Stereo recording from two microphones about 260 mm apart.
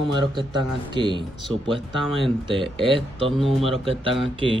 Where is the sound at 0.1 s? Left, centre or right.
Centre.